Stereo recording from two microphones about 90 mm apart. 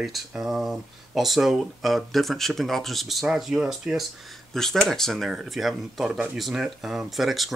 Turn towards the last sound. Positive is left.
turn(degrees=0)  # may be behind; listen again after turning